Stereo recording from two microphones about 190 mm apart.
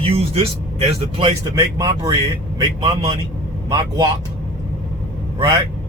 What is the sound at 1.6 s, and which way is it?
A man's voice, 15° right (ahead or behind).